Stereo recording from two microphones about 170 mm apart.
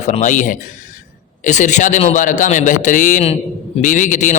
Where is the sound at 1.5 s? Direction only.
45° left (ahead or behind).